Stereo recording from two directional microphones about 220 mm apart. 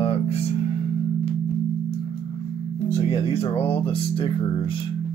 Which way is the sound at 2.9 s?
30° left (ahead or behind).